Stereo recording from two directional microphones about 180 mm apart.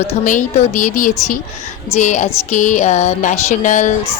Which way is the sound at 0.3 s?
45° left (ahead or behind).